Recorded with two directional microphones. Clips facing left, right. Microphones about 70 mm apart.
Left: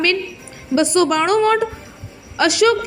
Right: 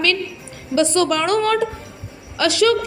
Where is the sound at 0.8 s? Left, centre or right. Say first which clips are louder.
Left 1 dB; centre.